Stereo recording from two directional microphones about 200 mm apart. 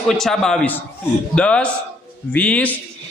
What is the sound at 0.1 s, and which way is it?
A man's voice, centre (ahead or behind).